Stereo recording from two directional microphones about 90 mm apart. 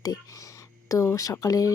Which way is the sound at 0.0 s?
45° left (ahead or behind).